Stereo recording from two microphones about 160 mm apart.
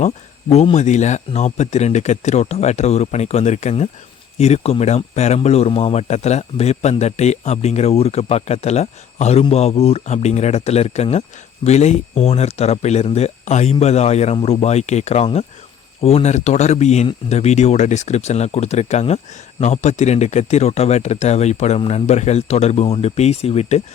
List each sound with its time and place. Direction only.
0.5 s speech: 40° left (ahead or behind)